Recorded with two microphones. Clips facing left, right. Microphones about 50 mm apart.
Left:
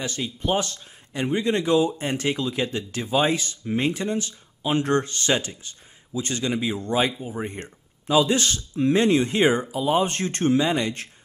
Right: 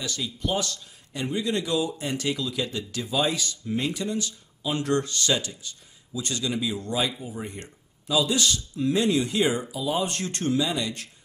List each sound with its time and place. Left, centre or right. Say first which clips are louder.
0.0 s speech: left 3 dB; left